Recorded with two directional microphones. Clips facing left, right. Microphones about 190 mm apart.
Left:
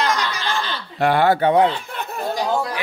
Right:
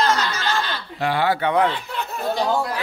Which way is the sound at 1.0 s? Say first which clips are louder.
Left 5 dB; 55° left (ahead or behind).